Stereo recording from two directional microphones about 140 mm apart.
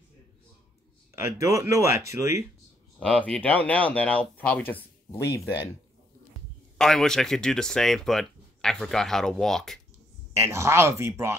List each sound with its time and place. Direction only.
1.2 s speech: 20° right (ahead or behind)
3.0 s speech: 5° left (ahead or behind)
6.8 s speech: 5° left (ahead or behind)
10.3 s speech: 20° right (ahead or behind)